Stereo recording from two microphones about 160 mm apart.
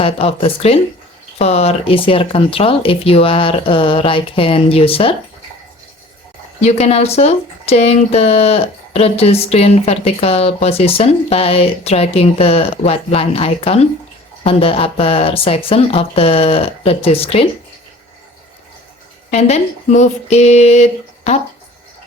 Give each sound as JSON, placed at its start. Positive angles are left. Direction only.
{"t": 0.0, "sound": "speech", "side_deg": 35}
{"t": 6.6, "sound": "speech", "side_deg": 40}
{"t": 19.3, "sound": "speech", "side_deg": 45}